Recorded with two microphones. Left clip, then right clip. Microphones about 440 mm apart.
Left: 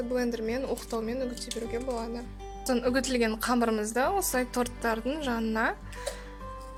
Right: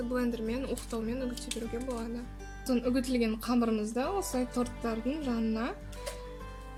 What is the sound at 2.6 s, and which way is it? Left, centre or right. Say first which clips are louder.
Speech: left 4 dB; centre.